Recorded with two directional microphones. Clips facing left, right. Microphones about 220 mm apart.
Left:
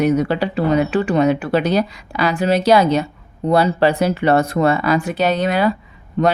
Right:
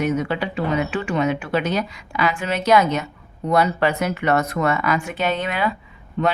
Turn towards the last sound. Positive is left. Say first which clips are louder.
# left 5 dB
turn(degrees=40)  # may be behind; listen again after turning